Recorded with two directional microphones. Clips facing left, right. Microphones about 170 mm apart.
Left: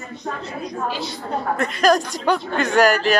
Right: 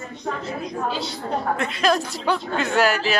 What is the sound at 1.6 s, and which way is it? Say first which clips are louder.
Speech: left 6 dB; 40° left (ahead or behind).